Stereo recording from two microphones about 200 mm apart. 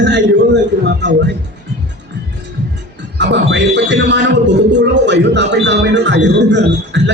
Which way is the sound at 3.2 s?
60° right (ahead or behind).